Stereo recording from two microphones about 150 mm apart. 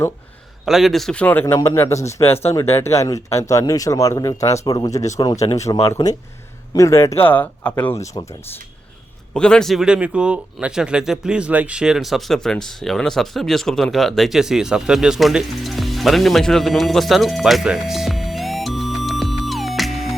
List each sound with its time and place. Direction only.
0.6 s speech: centre (ahead or behind); by 8.4 s 20° left (ahead or behind)
9.3 s speech: 5° left (ahead or behind)